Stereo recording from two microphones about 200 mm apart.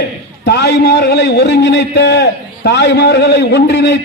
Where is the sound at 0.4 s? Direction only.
60° left (ahead or behind).